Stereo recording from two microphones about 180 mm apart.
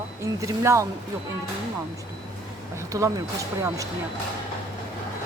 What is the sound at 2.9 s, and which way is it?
Speech, 20° right (ahead or behind).